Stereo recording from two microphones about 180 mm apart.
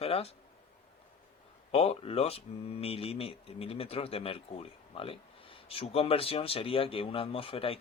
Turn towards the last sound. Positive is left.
turn(degrees=30)  # may be behind; listen again after turning